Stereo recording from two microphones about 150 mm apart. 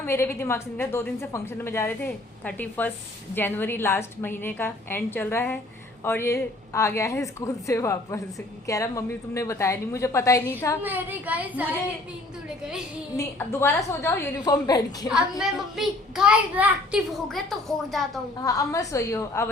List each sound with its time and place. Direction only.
0.0 s a woman's voice: 15° left (ahead or behind)
10.8 s speech: 10° right (ahead or behind)
13.1 s a woman's voice: 15° left (ahead or behind)
15.0 s a child's voice: 5° right (ahead or behind)
18.4 s a woman's voice: 20° left (ahead or behind)